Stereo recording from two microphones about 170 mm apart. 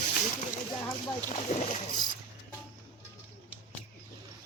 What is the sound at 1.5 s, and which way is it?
Speech, 45° left (ahead or behind).